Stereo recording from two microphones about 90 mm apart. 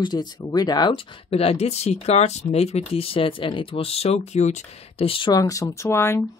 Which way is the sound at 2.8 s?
90° left.